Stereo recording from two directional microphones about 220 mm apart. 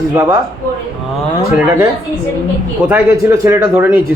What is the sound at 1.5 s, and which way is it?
Speech, 10° right (ahead or behind).